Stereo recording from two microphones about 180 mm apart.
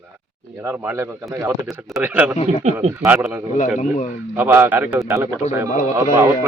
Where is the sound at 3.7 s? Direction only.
40° left (ahead or behind).